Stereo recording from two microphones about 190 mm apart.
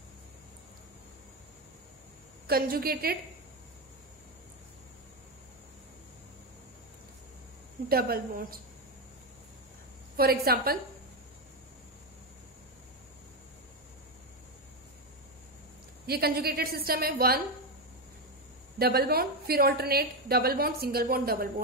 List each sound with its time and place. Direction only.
2.4 s a woman's voice: 50° right (ahead or behind)
7.9 s a woman's voice: 50° right (ahead or behind)
10.1 s a woman's voice: 55° right (ahead or behind)
16.1 s a woman's voice: 55° right (ahead or behind)
18.8 s a woman's voice: 55° right (ahead or behind)